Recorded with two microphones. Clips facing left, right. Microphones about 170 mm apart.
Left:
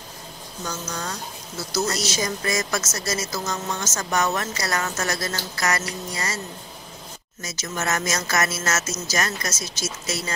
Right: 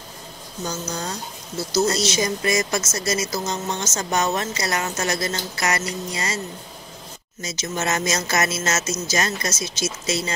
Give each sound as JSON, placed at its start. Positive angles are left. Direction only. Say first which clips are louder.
{"t": 0.7, "sound": "speech", "louder": "right 2 dB", "side_deg": -30}
{"t": 7.4, "sound": "speech", "louder": "right 2 dB", "side_deg": -20}